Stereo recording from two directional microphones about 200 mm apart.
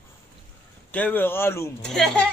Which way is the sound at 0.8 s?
10° left (ahead or behind).